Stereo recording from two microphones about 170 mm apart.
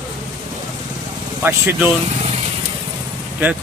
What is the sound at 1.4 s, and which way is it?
Speech, 10° right (ahead or behind).